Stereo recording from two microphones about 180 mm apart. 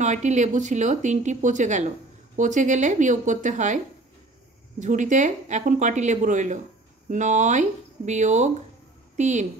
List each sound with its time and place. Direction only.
0.0 s a woman's voice: 40° right (ahead or behind)